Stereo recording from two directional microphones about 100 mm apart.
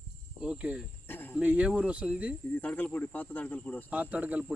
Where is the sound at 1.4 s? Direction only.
10° right (ahead or behind).